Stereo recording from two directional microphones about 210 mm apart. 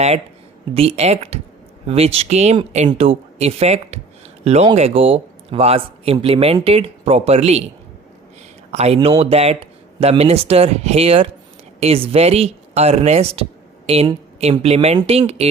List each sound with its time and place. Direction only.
0.7 s speech: 25° right (ahead or behind)
8.7 s speech: 30° right (ahead or behind)